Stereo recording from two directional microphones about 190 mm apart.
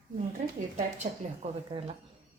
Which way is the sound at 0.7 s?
40° right (ahead or behind).